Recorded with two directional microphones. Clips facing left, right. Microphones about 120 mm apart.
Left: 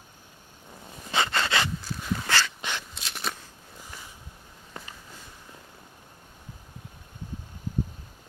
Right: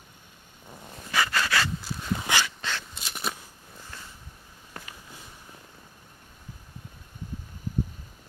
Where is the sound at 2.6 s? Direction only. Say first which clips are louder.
Even; 15° left (ahead or behind).